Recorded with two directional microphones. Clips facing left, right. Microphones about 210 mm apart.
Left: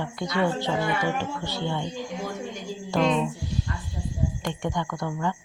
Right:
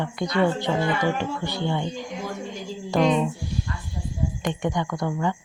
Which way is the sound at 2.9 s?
Centre (ahead or behind).